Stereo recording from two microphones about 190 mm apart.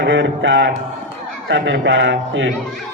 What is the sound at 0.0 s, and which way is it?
A man's voice, 70° right (ahead or behind).